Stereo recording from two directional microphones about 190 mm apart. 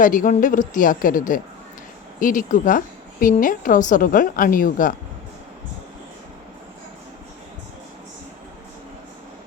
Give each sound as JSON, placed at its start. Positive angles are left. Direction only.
{"t": 0.0, "sound": "a woman's voice", "side_deg": 45}